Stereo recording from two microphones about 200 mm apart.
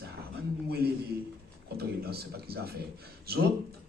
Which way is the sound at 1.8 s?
50° right (ahead or behind).